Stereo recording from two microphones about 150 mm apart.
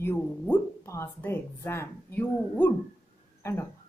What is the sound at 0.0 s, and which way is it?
Speech, 15° left (ahead or behind).